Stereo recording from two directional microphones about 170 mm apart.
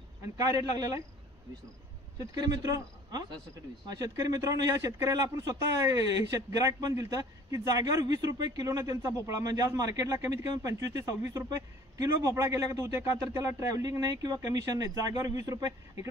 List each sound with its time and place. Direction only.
0.2 s a man's voice: 20° right (ahead or behind)
2.3 s a man's voice: 20° right (ahead or behind)